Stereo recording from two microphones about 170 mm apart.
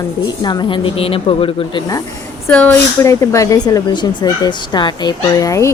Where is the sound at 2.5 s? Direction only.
10° left (ahead or behind).